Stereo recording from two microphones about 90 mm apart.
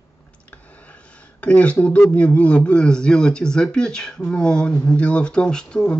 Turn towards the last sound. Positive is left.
turn(degrees=10)  # may be behind; listen again after turning